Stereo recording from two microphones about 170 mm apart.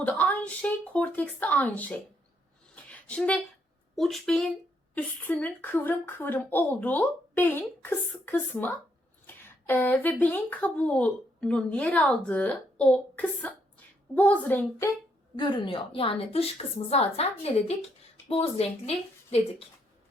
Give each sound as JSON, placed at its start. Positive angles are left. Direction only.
{"t": 0.0, "sound": "speech", "side_deg": 5}
{"t": 2.7, "sound": "a sound", "side_deg": 10}
{"t": 3.9, "sound": "speech", "side_deg": 0}
{"t": 15.4, "sound": "a woman's voice", "side_deg": 30}
{"t": 18.9, "sound": "speech", "side_deg": 35}